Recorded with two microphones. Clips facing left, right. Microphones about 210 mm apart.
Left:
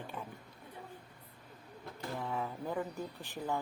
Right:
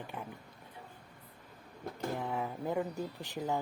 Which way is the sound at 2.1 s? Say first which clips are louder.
Left 1 dB; 20° right (ahead or behind).